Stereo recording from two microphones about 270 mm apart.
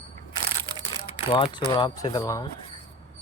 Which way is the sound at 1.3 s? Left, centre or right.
Centre.